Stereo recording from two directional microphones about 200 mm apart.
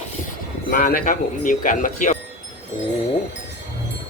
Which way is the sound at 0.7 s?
45° left (ahead or behind).